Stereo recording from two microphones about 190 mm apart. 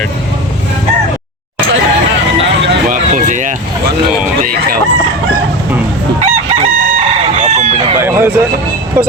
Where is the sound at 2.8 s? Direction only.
40° right (ahead or behind).